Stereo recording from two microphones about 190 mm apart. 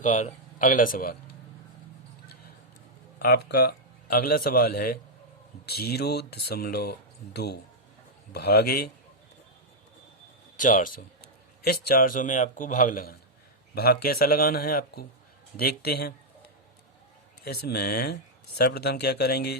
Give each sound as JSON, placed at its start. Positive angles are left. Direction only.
{"t": 0.0, "sound": "speech", "side_deg": 40}
{"t": 3.2, "sound": "a man's voice", "side_deg": 55}
{"t": 10.6, "sound": "a man's voice", "side_deg": 45}
{"t": 17.4, "sound": "speech", "side_deg": 55}